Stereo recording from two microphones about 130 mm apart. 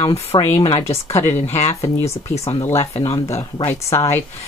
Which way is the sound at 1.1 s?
20° left (ahead or behind).